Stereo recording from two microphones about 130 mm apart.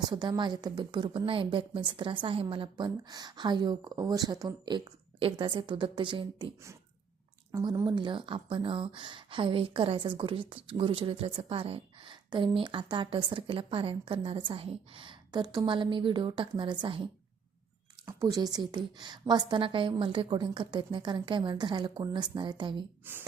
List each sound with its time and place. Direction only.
0.1 s speech: 35° right (ahead or behind)
7.6 s speech: 30° right (ahead or behind)
18.0 s speech: 25° right (ahead or behind)